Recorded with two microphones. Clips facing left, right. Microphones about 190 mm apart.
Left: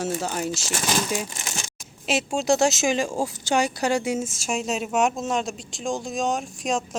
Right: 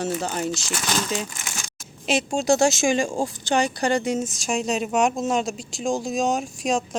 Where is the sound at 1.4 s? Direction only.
25° left (ahead or behind).